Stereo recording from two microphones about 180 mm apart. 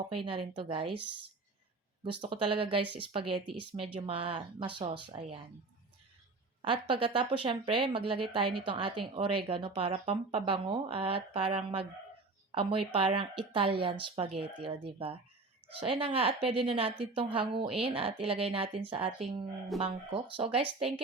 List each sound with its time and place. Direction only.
0.0 s speech: 30° right (ahead or behind)
2.2 s speech: 30° right (ahead or behind)
6.6 s a woman's voice: 30° right (ahead or behind)